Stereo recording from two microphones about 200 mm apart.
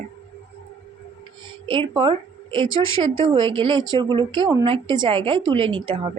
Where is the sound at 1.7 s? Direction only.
25° right (ahead or behind).